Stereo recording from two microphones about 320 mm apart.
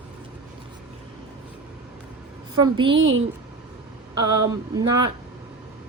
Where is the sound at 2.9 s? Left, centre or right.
Right.